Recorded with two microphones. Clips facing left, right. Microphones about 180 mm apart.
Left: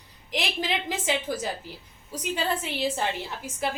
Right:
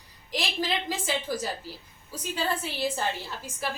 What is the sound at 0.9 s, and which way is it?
A woman's voice, 20° left (ahead or behind).